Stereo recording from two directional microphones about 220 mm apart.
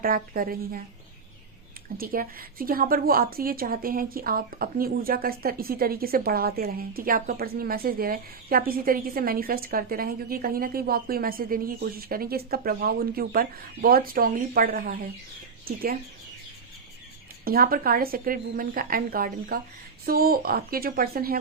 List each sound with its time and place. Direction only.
0.0 s a woman's voice: 40° right (ahead or behind)
2.0 s a woman's voice: 40° right (ahead or behind)
17.4 s a woman's voice: 40° right (ahead or behind)